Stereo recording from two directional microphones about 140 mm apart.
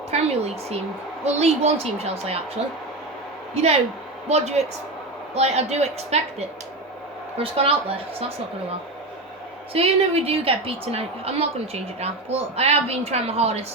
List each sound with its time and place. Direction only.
0.1 s a woman's voice: 50° right (ahead or behind)
3.5 s a man's voice: 50° right (ahead or behind)
7.3 s a woman's voice: 40° right (ahead or behind)
9.7 s a woman's voice: 45° right (ahead or behind)